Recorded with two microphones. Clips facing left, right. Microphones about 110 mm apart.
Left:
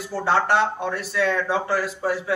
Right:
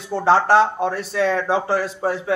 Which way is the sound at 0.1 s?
30° right (ahead or behind).